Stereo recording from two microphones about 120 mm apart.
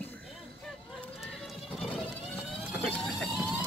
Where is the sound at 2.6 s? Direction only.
5° right (ahead or behind).